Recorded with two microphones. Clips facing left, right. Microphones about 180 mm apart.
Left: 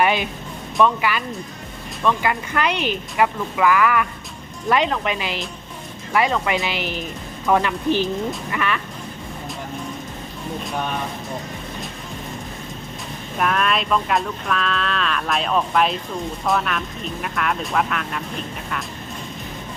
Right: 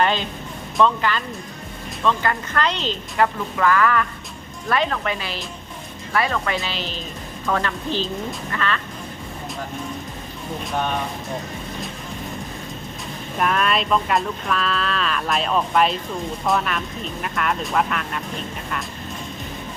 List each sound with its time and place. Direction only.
0.0 s speech: 10° left (ahead or behind)
13.4 s speech: centre (ahead or behind)